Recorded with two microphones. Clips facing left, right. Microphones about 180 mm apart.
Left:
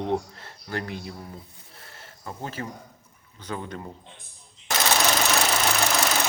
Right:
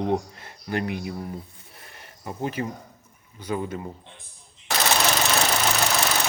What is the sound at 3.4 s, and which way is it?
Speech, 10° right (ahead or behind).